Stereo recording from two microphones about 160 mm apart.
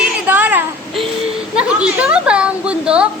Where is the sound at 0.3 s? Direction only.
10° right (ahead or behind).